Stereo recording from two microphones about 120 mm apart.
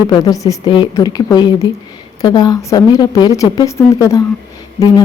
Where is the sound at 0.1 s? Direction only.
30° left (ahead or behind).